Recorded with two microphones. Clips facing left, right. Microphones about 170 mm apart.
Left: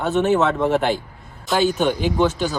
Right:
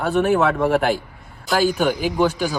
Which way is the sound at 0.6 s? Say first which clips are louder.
Right 1 dB; 10° right (ahead or behind).